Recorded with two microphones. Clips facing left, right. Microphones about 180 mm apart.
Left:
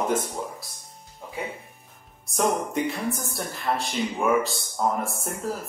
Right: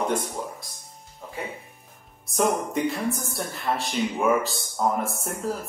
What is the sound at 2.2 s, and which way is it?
Speech, centre (ahead or behind).